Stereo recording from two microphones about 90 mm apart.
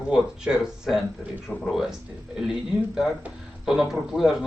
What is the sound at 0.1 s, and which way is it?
Speech, 10° right (ahead or behind).